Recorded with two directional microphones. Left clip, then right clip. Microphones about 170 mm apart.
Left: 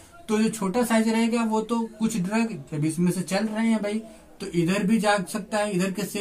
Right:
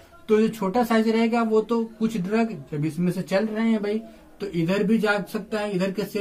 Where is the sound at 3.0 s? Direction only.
20° left (ahead or behind).